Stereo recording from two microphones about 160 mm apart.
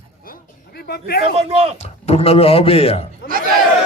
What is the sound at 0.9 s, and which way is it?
Speech, 85° left.